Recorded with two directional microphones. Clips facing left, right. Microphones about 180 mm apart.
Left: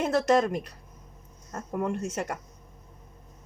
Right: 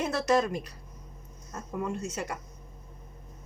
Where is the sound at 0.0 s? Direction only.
50° left (ahead or behind).